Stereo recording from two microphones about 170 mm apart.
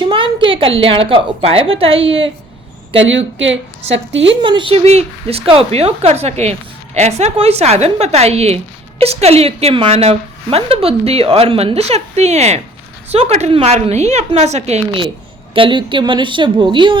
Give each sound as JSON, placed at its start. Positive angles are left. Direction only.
{"t": 0.0, "sound": "a woman's voice", "side_deg": -30}
{"t": 3.0, "sound": "a woman's voice", "side_deg": -90}
{"t": 4.4, "sound": "a woman's voice", "side_deg": -30}